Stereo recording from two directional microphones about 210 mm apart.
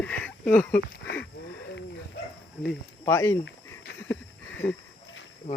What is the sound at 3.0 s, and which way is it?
Speech, 15° left (ahead or behind).